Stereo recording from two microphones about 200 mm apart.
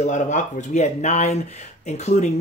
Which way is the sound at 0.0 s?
35° left (ahead or behind).